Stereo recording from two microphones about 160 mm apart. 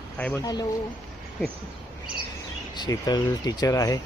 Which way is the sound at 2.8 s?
25° left (ahead or behind).